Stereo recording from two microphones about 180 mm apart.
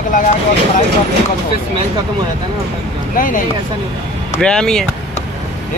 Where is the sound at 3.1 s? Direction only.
50° left (ahead or behind).